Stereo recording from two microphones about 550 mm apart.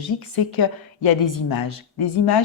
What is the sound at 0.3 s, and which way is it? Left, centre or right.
Speech, left.